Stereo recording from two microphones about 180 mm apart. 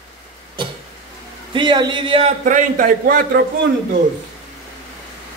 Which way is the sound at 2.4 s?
45° right (ahead or behind).